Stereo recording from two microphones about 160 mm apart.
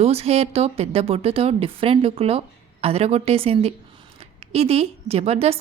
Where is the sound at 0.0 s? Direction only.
40° right (ahead or behind).